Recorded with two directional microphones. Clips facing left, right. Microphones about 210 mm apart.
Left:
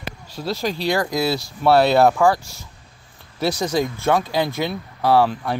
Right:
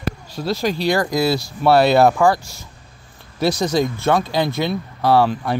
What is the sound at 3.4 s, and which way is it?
Speech, 10° left (ahead or behind).